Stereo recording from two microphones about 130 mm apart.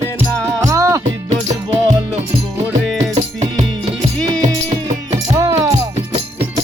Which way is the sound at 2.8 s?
5° left (ahead or behind).